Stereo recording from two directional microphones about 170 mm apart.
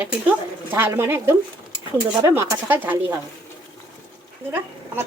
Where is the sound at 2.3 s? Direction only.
10° right (ahead or behind).